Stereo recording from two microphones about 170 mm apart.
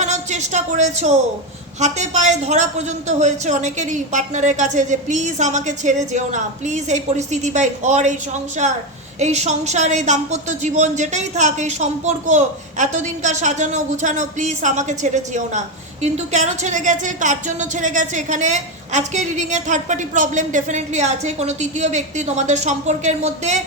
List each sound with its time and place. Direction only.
0.0 s a woman's voice: 45° right (ahead or behind)